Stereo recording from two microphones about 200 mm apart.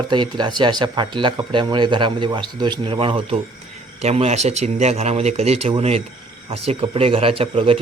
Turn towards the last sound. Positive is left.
turn(degrees=-25)  # may be behind; listen again after turning